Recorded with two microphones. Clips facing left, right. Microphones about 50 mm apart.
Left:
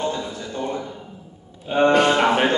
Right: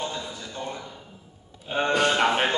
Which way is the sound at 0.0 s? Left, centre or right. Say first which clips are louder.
Left 6 dB; left.